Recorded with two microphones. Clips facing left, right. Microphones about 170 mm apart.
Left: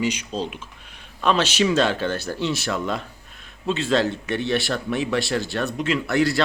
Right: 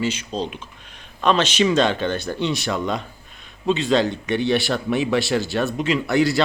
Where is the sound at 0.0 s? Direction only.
10° left (ahead or behind).